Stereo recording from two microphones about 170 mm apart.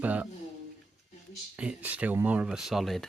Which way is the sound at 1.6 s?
10° right (ahead or behind).